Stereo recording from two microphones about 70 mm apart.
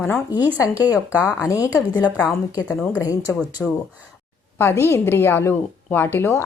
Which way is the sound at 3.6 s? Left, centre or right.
Centre.